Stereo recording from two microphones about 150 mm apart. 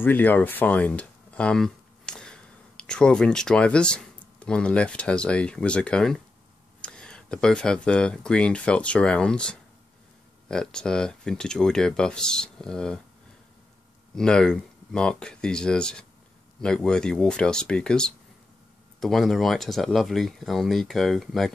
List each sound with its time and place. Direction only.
0.0 s speech: 10° left (ahead or behind)
14.1 s speech: 5° left (ahead or behind)